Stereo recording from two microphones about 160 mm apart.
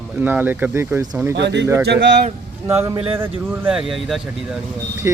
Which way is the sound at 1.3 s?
90° right.